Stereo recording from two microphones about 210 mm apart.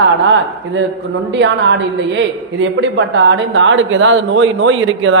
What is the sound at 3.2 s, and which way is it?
A man's voice, 60° right (ahead or behind).